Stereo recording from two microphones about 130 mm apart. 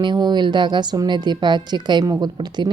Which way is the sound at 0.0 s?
35° right (ahead or behind).